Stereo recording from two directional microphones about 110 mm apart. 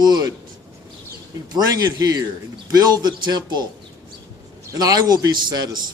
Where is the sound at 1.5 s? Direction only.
35° right (ahead or behind).